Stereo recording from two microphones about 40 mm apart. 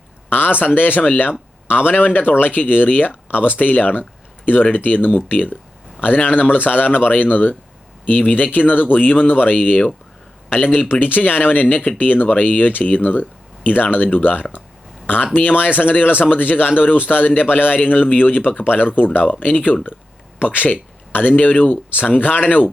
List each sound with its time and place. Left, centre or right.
0.3 s speech: left
11.0 s speech: left